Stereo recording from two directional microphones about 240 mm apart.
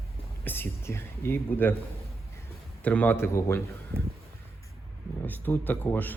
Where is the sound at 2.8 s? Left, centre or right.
Centre.